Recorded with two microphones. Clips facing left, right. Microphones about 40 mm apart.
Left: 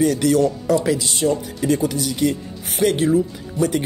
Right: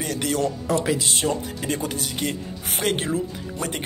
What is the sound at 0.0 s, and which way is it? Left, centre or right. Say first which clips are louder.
Speech: left 8 dB; right.